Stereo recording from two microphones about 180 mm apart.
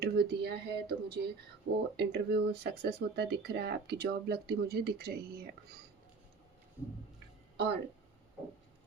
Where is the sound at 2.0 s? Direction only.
65° right (ahead or behind).